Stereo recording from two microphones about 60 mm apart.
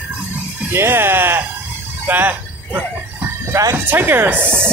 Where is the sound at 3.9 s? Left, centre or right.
Right.